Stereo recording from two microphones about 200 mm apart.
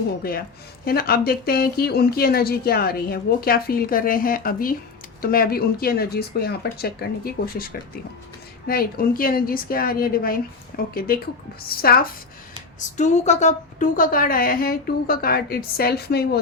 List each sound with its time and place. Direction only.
0.2 s speech: 50° left (ahead or behind)
13.0 s speech: 35° left (ahead or behind); by 16.4 s 50° left (ahead or behind)